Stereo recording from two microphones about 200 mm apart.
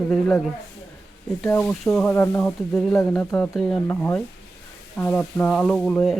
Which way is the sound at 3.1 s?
Centre (ahead or behind).